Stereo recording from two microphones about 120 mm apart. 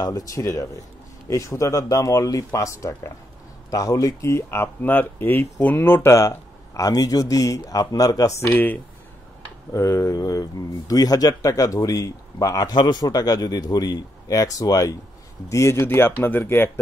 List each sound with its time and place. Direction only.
0.0 s speech: 30° left (ahead or behind)